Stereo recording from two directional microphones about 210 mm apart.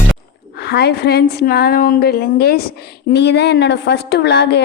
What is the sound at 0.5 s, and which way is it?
A woman's voice, 50° left (ahead or behind).